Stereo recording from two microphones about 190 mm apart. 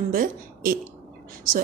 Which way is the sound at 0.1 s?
50° right (ahead or behind).